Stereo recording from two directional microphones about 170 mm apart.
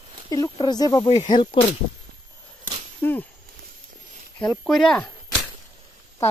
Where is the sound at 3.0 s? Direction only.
10° left (ahead or behind).